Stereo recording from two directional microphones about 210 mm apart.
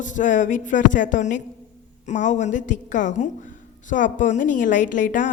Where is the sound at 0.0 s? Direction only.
35° left (ahead or behind).